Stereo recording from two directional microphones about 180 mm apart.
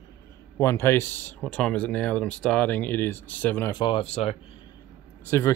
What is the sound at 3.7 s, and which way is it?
Speech, 25° left (ahead or behind).